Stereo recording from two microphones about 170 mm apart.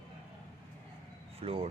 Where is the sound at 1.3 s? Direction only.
35° right (ahead or behind).